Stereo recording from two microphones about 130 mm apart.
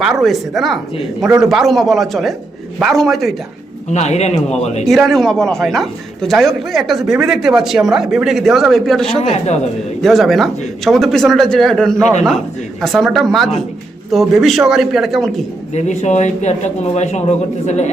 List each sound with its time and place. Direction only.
0.0 s a man's voice: centre (ahead or behind)
3.9 s a man's voice: 60° left (ahead or behind)
4.9 s a man's voice: centre (ahead or behind)
15.7 s a man's voice: 60° left (ahead or behind)